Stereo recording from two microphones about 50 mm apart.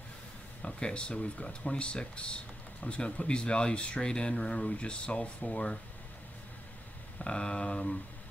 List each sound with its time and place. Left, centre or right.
0.6 s speech: centre
7.2 s speech: centre